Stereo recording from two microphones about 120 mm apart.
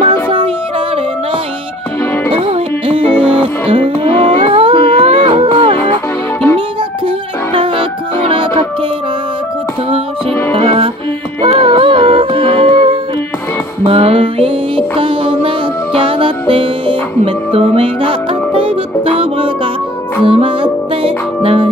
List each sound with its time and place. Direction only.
2.3 s music: 55° right (ahead or behind)
3.6 s humming: 50° right (ahead or behind)
7.5 s music: 45° right (ahead or behind)
10.5 s music: 50° right (ahead or behind)
13.8 s music: 50° right (ahead or behind)